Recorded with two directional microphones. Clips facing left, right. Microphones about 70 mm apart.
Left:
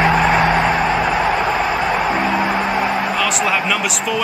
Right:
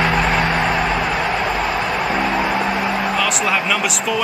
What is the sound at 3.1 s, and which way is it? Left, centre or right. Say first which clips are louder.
Speech: left 1 dB; centre.